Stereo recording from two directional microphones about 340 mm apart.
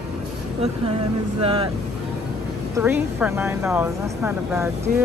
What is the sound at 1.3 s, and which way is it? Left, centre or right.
Speech, centre.